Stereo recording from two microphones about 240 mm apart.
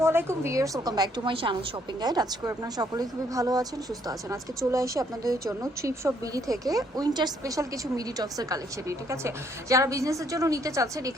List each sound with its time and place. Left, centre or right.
0.0 s speech: centre